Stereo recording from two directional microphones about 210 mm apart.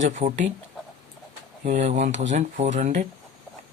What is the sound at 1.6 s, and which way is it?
Speech, 30° right (ahead or behind).